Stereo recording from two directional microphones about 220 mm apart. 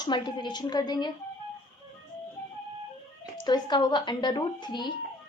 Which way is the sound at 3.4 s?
20° left (ahead or behind).